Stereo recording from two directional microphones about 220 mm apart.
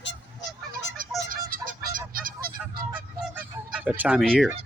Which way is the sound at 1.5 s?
40° right (ahead or behind).